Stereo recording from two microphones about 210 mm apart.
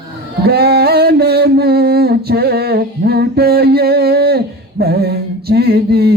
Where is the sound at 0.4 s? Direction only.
50° right (ahead or behind).